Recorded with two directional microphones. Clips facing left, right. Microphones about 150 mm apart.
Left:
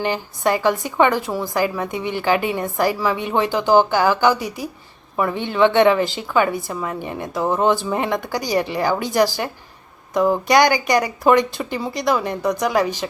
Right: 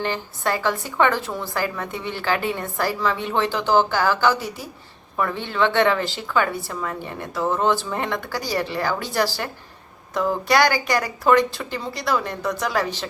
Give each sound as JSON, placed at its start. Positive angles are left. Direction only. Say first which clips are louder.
{"t": 0.0, "sound": "a woman's voice", "louder": "left 4 dB", "side_deg": 15}